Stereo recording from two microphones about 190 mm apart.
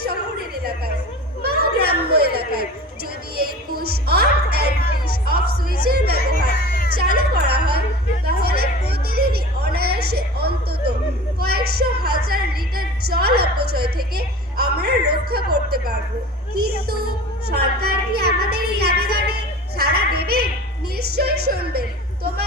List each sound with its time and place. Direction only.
1.4 s children playing: 55° right (ahead or behind)
3.3 s music: 55° right (ahead or behind)
5.8 s music: 55° right (ahead or behind)
6.7 s music: 50° left (ahead or behind)
6.9 s music: 55° right (ahead or behind)
16.6 s a sound: 55° right (ahead or behind)
20.9 s music: 55° right (ahead or behind)